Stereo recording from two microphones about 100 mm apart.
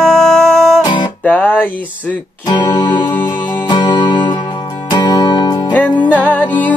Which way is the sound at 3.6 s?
50° left (ahead or behind).